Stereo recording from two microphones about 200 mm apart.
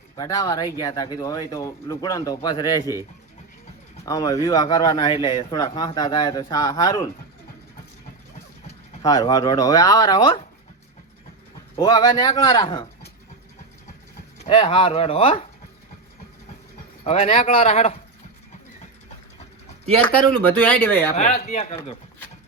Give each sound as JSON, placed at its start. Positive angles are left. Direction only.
{"t": 0.2, "sound": "speech", "side_deg": 15}
{"t": 4.0, "sound": "a man's voice", "side_deg": 20}
{"t": 9.0, "sound": "a man's voice", "side_deg": 20}
{"t": 11.8, "sound": "a man's voice", "side_deg": 20}
{"t": 14.3, "sound": "a man's voice", "side_deg": 30}
{"t": 17.0, "sound": "a man's voice", "side_deg": 30}
{"t": 20.0, "sound": "speech", "side_deg": 10}
{"t": 21.2, "sound": "speech", "side_deg": 35}